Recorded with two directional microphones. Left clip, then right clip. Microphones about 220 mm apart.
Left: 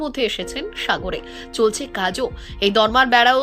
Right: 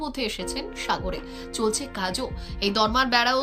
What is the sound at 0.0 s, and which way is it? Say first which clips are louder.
Speech: left 7 dB; 10° left (ahead or behind).